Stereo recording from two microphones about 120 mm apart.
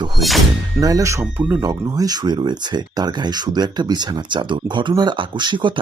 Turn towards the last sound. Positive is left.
turn(degrees=-40)  # may be behind; listen again after turning